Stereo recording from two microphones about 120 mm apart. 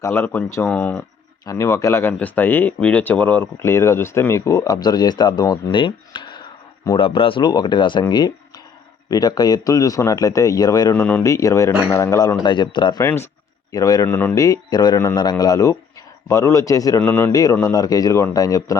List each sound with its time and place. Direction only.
0.0 s speech: 20° left (ahead or behind)
1.5 s a man's voice: 25° left (ahead or behind); by 8.0 s 40° left (ahead or behind)
8.1 s a sound: 35° left (ahead or behind)
9.0 s speech: 35° left (ahead or behind)
12.4 s a man's voice: 40° left (ahead or behind)
17.0 s speech: 15° left (ahead or behind)
17.3 s speech: 30° left (ahead or behind)